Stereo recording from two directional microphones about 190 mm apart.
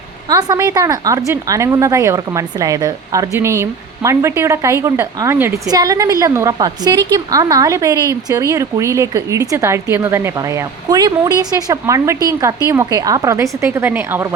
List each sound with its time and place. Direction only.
0.3 s a woman's voice: 20° right (ahead or behind)